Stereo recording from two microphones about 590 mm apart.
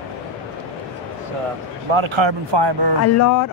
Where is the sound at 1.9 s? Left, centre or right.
Right.